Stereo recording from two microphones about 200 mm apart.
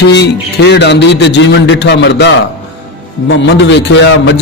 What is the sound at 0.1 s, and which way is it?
Speech, 60° left (ahead or behind).